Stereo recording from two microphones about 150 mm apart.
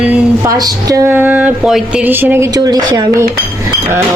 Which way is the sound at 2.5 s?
25° right (ahead or behind).